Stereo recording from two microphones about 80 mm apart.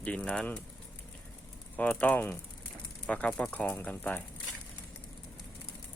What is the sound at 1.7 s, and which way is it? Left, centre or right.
Speech, centre.